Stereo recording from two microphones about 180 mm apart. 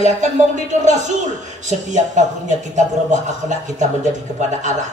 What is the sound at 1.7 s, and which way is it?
A woman's voice, 45° right (ahead or behind).